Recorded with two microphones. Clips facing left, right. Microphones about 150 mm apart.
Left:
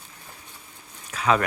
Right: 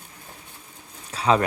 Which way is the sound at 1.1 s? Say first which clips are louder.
Right 2 dB; 30° right (ahead or behind).